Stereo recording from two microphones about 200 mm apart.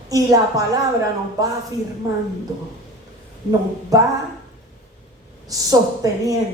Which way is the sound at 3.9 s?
15° right (ahead or behind).